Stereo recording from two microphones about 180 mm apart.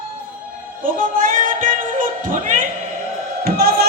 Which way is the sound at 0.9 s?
50° right (ahead or behind).